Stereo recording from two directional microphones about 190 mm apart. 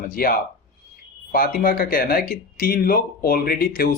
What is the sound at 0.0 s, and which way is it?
Speech, 50° left (ahead or behind).